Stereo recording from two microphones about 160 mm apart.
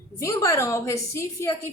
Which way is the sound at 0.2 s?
20° left (ahead or behind).